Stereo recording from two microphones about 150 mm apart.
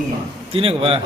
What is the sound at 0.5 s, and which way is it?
Speech, 40° right (ahead or behind).